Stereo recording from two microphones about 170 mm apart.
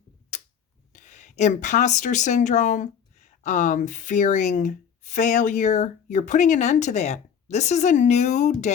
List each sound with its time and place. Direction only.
0.3 s tick-tock: 45° left (ahead or behind)
0.9 s speech: 45° left (ahead or behind)